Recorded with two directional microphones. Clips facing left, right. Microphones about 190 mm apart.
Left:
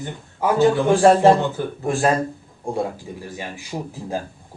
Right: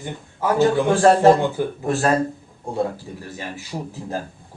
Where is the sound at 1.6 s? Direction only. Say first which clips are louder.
Right 3 dB; 15° right (ahead or behind).